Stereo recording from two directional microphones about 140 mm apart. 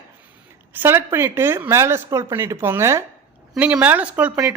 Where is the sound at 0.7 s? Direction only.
15° right (ahead or behind).